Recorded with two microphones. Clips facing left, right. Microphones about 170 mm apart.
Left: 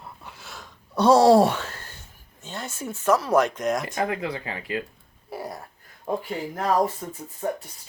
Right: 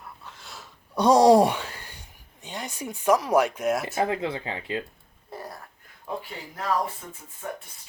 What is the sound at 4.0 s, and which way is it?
Speech, 25° right (ahead or behind).